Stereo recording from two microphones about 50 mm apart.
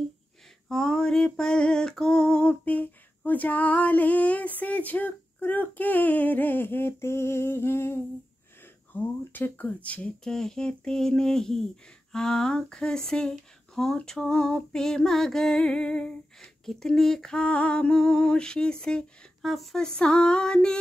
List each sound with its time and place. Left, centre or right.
0.7 s speech: centre
2.6 s a sound: left
8.9 s a sound: left
10.2 s speech: centre
19.4 s speech: centre
19.8 s speech: centre